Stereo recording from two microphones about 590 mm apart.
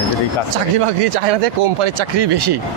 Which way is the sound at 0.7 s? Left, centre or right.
Right.